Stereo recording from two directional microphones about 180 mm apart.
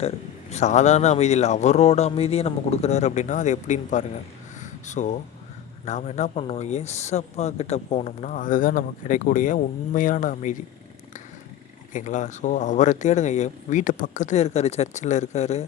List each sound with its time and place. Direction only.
0.5 s speech: 40° left (ahead or behind)
4.6 s a sound: 40° left (ahead or behind)
5.8 s speech: 40° left (ahead or behind)
11.9 s speech: 45° left (ahead or behind)